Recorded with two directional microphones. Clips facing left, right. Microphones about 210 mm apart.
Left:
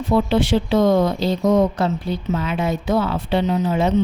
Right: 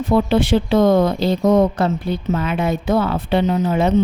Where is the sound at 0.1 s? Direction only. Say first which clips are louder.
Right 2 dB; 55° right (ahead or behind).